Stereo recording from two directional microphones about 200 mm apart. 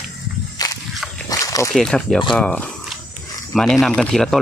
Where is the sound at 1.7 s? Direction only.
5° left (ahead or behind).